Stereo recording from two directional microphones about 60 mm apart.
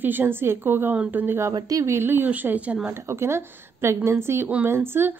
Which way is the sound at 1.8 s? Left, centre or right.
Right.